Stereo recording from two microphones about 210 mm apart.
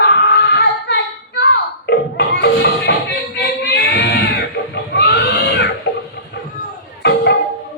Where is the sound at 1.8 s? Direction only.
50° left (ahead or behind).